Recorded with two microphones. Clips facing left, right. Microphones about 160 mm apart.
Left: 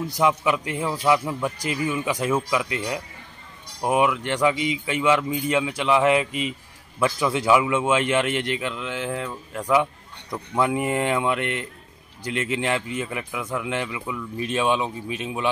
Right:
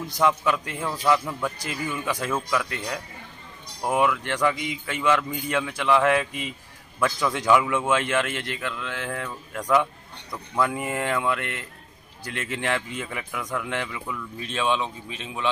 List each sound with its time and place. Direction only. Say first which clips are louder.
0.0 s a man's voice: left 1 dB; 10° left (ahead or behind)
10.3 s a man's voice: left 3 dB; 20° left (ahead or behind)